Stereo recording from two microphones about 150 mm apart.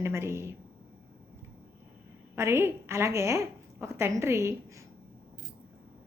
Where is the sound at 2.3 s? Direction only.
15° right (ahead or behind).